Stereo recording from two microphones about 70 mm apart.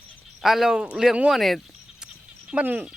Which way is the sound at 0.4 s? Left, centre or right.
Centre.